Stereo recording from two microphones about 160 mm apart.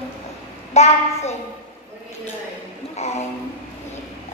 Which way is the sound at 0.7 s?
45° left (ahead or behind).